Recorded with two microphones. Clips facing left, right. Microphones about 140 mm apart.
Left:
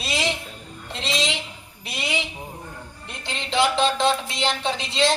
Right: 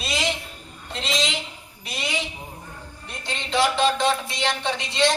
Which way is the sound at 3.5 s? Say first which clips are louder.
Even; 30° left (ahead or behind).